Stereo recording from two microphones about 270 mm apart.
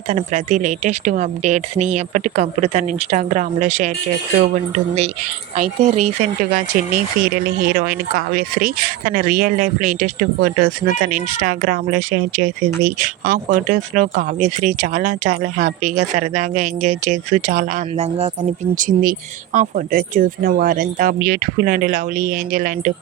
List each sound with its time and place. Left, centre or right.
0.1 s speech: right
5.5 s speech: right